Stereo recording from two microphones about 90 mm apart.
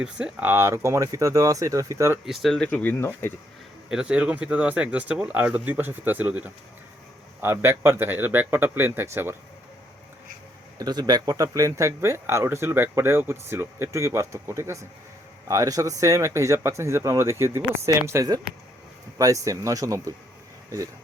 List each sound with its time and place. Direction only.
0.0 s speech: 10° right (ahead or behind)
0.5 s speech: 30° right (ahead or behind)
2.2 s speech: 5° right (ahead or behind)
2.5 s speech: 15° left (ahead or behind)
3.8 s speech: 10° right (ahead or behind); by 9.3 s 25° right (ahead or behind)
10.8 s speech: 45° right (ahead or behind)